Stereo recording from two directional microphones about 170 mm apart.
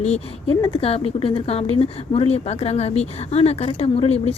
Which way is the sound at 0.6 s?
35° left (ahead or behind).